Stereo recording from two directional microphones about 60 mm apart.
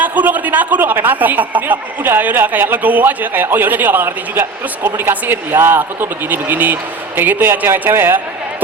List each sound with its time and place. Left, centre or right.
0.0 s speech: right